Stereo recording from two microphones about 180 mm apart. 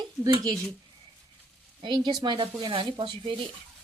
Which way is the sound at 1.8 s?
25° right (ahead or behind).